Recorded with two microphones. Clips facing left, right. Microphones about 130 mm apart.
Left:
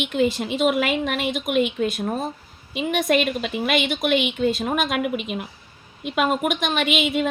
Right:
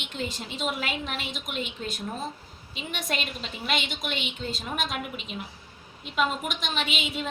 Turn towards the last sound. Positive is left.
turn(degrees=70)  # may be behind; listen again after turning